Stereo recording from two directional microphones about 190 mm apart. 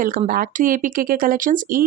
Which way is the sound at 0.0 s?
45° right (ahead or behind).